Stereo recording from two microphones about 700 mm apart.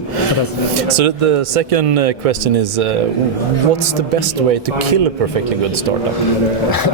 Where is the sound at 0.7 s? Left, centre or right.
Right.